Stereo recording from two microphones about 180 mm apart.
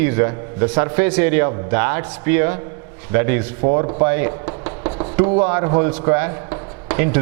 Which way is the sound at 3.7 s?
20° right (ahead or behind).